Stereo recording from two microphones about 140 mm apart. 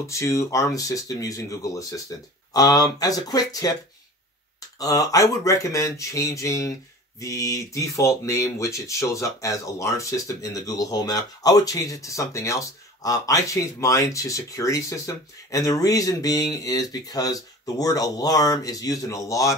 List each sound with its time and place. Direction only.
0.0 s speech: 20° left (ahead or behind)
4.7 s speech: 25° left (ahead or behind)